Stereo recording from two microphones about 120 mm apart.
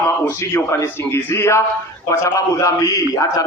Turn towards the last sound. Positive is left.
turn(degrees=30)  # may be behind; listen again after turning